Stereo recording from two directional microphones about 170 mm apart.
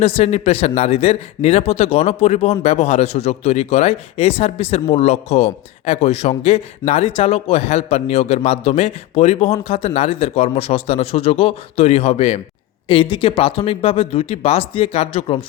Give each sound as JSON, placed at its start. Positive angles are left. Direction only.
{"t": 0.0, "sound": "speech", "side_deg": 35}